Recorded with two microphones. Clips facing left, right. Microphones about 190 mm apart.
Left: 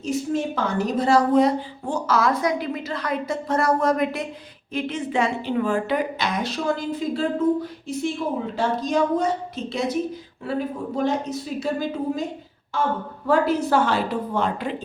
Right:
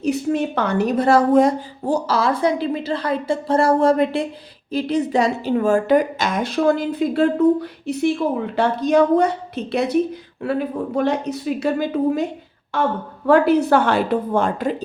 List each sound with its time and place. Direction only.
0.0 s a woman's voice: 65° right (ahead or behind); by 14.8 s 45° right (ahead or behind)